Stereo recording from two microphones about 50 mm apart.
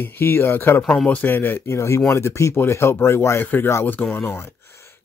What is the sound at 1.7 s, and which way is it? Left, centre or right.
Speech, left.